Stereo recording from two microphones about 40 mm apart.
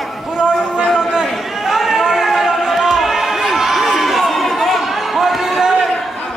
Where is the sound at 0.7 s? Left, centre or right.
Right.